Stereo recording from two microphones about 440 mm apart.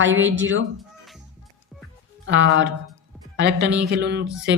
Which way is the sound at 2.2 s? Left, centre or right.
Right.